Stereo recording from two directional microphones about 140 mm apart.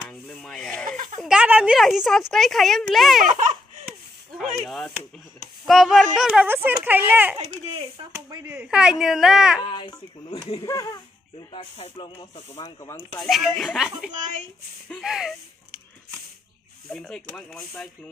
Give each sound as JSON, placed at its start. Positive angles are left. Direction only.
{"t": 0.0, "sound": "rub", "side_deg": 5}
{"t": 0.8, "sound": "baby laughter", "side_deg": -80}
{"t": 1.2, "sound": "speech", "side_deg": -5}
{"t": 4.4, "sound": "speech", "side_deg": 0}
{"t": 6.4, "sound": "speech", "side_deg": -15}
{"t": 7.7, "sound": "speech", "side_deg": -40}
{"t": 8.1, "sound": "speech", "side_deg": -20}
{"t": 8.6, "sound": "speech", "side_deg": -5}
{"t": 9.7, "sound": "speech", "side_deg": 35}
{"t": 11.5, "sound": "snake", "side_deg": 50}
{"t": 12.5, "sound": "speech", "side_deg": 25}
{"t": 13.2, "sound": "speech", "side_deg": 0}
{"t": 16.9, "sound": "speech", "side_deg": 5}